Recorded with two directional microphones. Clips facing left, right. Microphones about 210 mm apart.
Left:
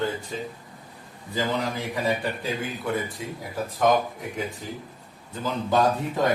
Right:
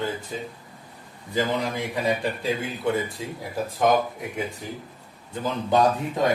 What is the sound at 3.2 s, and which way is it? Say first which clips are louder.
Speech: right 1 dB; 30° right (ahead or behind).